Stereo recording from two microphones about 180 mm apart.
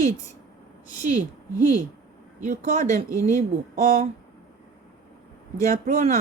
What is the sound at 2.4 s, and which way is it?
A woman's voice, 50° right (ahead or behind).